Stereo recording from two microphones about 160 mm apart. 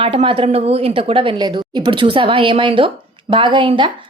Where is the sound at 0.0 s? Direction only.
35° right (ahead or behind).